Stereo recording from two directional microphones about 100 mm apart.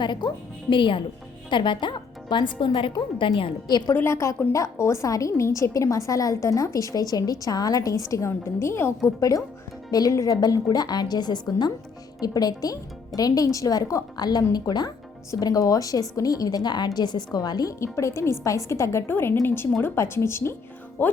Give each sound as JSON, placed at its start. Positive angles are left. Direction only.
{"t": 0.0, "sound": "a woman's voice", "side_deg": 50}
{"t": 3.9, "sound": "a woman's voice", "side_deg": 25}
{"t": 9.9, "sound": "a woman's voice", "side_deg": 35}